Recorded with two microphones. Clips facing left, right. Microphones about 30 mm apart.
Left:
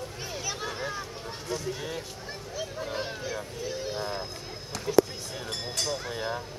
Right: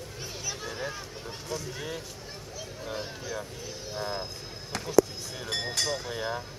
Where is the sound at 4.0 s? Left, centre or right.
Centre.